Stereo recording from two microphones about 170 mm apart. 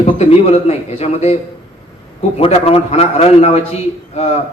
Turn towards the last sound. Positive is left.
turn(degrees=40)  # may be behind; listen again after turning